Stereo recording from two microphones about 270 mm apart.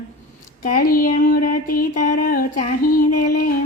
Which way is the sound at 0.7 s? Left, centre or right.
Left.